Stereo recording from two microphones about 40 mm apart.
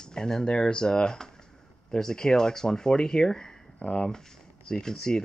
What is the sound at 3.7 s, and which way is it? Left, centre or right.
Speech, left.